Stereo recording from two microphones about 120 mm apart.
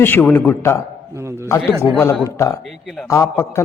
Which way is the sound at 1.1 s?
25° right (ahead or behind).